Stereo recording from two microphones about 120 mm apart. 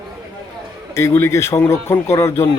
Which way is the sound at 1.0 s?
25° left (ahead or behind).